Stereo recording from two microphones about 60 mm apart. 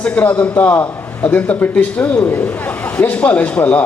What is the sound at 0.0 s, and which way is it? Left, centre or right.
A man's voice, left.